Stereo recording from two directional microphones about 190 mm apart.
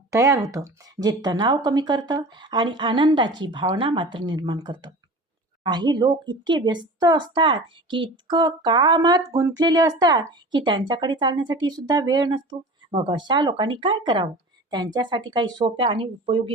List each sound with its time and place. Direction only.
0.1 s speech: 15° right (ahead or behind)